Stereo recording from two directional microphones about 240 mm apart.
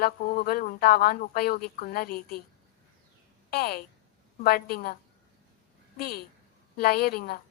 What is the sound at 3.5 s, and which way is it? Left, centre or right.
A woman's voice, left.